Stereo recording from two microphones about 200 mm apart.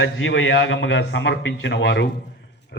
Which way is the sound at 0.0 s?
75° left (ahead or behind).